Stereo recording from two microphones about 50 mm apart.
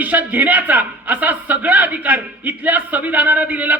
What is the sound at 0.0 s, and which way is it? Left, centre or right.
A man's voice, right.